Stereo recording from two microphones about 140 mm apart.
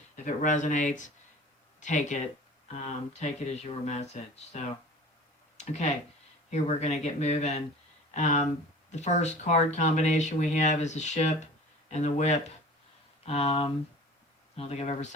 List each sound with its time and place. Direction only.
0.3 s speech: 65° left (ahead or behind)